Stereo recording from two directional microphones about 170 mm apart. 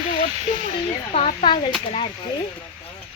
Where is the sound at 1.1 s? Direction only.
40° left (ahead or behind).